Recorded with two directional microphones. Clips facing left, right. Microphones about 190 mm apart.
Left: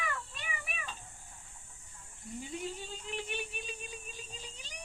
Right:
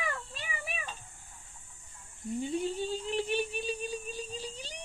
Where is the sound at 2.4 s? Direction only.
30° right (ahead or behind).